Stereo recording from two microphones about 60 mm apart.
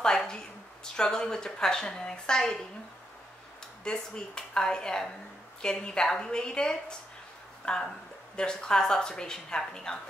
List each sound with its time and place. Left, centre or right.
0.0 s a sound: centre
0.9 s a woman's voice: centre
3.8 s a woman's voice: centre